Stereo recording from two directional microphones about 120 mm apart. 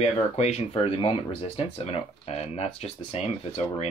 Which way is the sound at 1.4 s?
60° left (ahead or behind).